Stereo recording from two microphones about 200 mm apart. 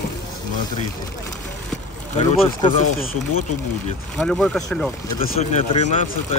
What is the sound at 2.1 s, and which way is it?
Speech, 35° left (ahead or behind).